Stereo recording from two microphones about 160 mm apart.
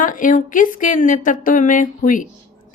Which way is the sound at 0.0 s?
55° left (ahead or behind).